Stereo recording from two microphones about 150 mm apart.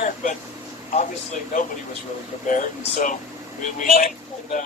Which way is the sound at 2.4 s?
60° left (ahead or behind).